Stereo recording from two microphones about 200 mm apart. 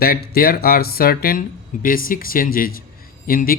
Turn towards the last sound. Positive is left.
turn(degrees=45)  # may be behind; listen again after turning